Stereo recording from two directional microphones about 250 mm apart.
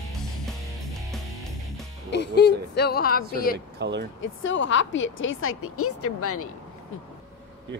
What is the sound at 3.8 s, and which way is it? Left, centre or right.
Speech, right.